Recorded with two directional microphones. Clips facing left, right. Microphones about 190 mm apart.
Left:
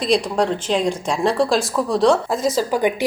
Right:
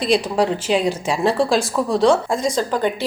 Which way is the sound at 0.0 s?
Centre (ahead or behind).